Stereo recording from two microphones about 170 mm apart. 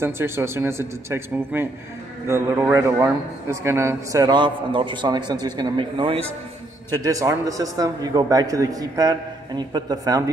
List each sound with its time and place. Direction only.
0.0 s a man's voice: 15° right (ahead or behind)